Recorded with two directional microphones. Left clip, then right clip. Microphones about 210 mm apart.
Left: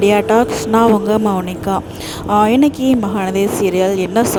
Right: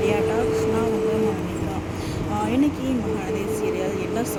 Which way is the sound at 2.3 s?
60° left (ahead or behind).